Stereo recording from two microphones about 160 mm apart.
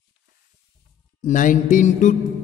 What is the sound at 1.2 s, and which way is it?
Mantra, 55° left (ahead or behind).